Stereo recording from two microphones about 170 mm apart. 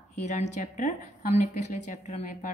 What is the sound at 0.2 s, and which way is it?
A woman's voice, 40° left (ahead or behind).